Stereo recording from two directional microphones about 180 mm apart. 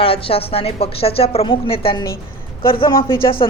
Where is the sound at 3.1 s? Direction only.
55° left (ahead or behind).